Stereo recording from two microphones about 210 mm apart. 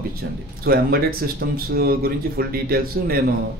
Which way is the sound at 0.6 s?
45° right (ahead or behind).